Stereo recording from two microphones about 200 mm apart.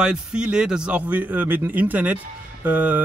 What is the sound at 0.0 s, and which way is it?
Speech, 5° right (ahead or behind).